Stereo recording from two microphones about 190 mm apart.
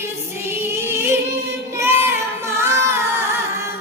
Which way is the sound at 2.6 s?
15° right (ahead or behind).